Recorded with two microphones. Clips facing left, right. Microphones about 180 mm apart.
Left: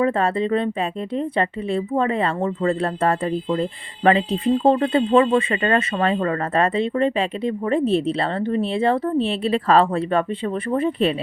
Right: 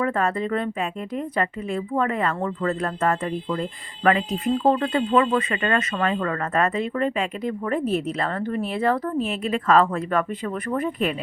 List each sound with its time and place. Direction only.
0.0 s speech: 30° left (ahead or behind)